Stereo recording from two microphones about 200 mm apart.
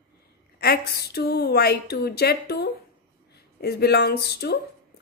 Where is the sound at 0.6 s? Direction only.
50° left (ahead or behind).